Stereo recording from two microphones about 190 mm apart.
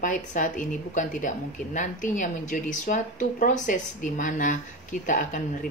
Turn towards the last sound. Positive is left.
turn(degrees=45)  # may be behind; listen again after turning